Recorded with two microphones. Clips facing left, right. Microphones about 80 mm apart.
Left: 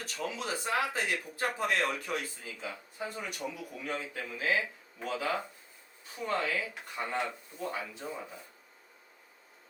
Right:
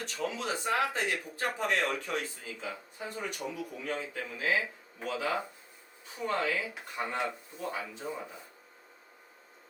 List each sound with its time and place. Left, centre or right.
0.0 s speech: centre
7.3 s speech: centre